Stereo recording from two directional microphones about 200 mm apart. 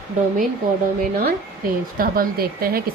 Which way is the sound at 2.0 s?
45° right (ahead or behind).